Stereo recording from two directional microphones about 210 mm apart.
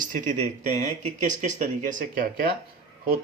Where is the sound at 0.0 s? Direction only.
40° right (ahead or behind).